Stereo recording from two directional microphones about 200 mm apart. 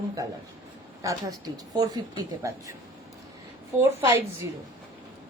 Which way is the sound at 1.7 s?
20° right (ahead or behind).